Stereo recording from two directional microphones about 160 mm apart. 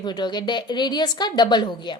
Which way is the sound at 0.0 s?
25° left (ahead or behind).